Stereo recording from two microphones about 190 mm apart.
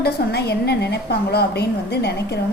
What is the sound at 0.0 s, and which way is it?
A woman's voice, 60° left (ahead or behind).